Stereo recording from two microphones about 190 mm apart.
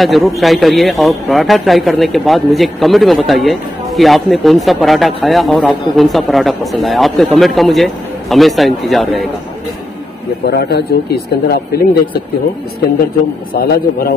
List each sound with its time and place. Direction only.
0.0 s a man's voice: centre (ahead or behind)
10.4 s speech: 55° left (ahead or behind)
13.5 s a man's voice: 50° left (ahead or behind)